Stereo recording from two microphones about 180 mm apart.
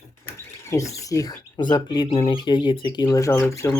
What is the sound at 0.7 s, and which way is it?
Speech, 15° left (ahead or behind).